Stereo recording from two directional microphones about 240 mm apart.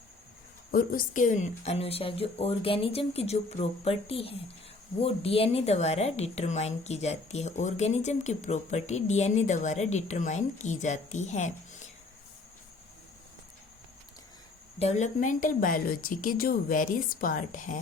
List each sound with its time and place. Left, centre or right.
0.7 s a woman's voice: left
14.8 s a woman's voice: left